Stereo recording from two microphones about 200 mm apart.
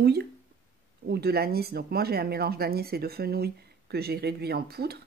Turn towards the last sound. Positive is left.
turn(degrees=-50)  # may be behind; listen again after turning